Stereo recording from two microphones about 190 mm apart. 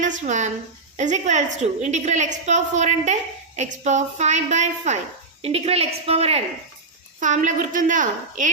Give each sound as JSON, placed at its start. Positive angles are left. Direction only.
{"t": 0.0, "sound": "a woman's voice", "side_deg": -40}